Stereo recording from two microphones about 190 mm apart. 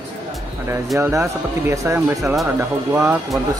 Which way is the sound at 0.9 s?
15° right (ahead or behind).